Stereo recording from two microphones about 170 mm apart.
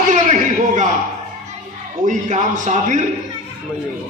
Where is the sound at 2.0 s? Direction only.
45° right (ahead or behind).